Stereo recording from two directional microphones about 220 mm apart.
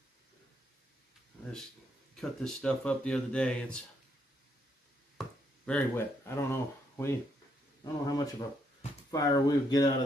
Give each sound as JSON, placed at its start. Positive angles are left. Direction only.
{"t": 2.1, "sound": "speech", "side_deg": 5}
{"t": 5.7, "sound": "speech", "side_deg": 10}